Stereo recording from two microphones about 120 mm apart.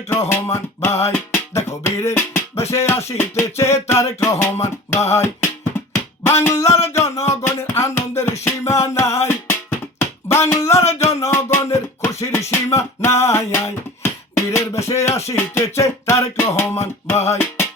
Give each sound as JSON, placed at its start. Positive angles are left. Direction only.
{"t": 0.3, "sound": "music", "side_deg": 20}
{"t": 10.0, "sound": "a sound", "side_deg": 25}
{"t": 11.0, "sound": "music", "side_deg": 25}